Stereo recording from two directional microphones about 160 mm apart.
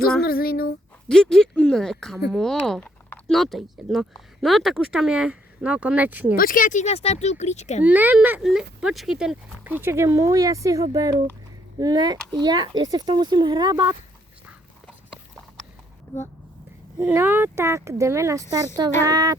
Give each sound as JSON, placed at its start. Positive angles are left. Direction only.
{"t": 0.2, "sound": "speech", "side_deg": 70}
{"t": 1.0, "sound": "speech", "side_deg": 5}
{"t": 6.3, "sound": "speech", "side_deg": 65}
{"t": 7.9, "sound": "speech", "side_deg": -10}
{"t": 14.8, "sound": "clip-clop", "side_deg": 0}
{"t": 17.0, "sound": "speech", "side_deg": -10}